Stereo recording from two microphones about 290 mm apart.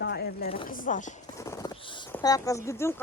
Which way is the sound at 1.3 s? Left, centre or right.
Centre.